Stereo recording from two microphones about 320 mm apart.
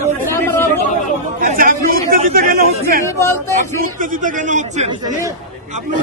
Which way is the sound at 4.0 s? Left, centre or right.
Right.